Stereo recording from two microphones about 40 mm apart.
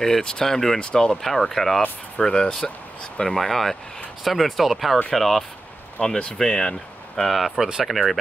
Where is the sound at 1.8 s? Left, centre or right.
Left.